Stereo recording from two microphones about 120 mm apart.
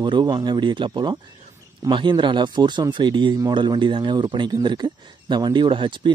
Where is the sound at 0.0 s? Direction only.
40° right (ahead or behind).